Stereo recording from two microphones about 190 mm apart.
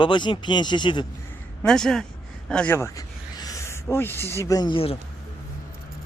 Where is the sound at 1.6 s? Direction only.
5° left (ahead or behind); by 4.9 s 30° left (ahead or behind).